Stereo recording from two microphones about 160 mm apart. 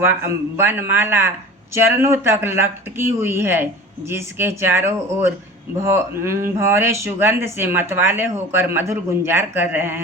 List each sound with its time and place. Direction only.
0.0 s speech: 15° right (ahead or behind)